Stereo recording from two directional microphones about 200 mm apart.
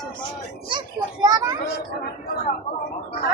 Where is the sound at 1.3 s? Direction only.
20° right (ahead or behind).